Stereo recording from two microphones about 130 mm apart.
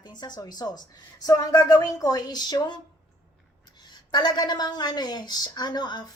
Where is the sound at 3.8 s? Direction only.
35° left (ahead or behind).